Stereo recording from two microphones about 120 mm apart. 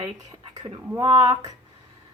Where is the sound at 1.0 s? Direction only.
45° right (ahead or behind).